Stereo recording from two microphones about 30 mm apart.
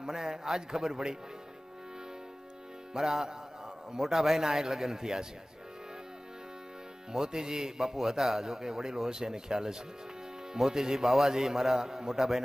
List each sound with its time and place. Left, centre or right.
0.0 s a man's voice: right
2.9 s a man's voice: centre
4.0 s a man's voice: centre
7.1 s a man's voice: right